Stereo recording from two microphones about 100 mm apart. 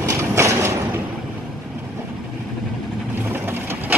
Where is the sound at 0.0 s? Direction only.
30° right (ahead or behind).